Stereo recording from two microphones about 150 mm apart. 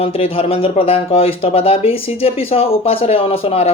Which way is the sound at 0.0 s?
40° left (ahead or behind).